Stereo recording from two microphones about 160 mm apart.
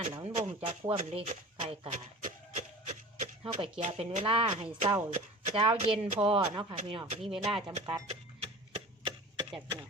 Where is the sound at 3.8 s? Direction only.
40° right (ahead or behind).